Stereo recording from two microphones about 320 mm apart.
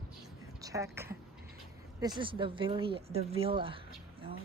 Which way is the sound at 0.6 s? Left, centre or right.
Centre.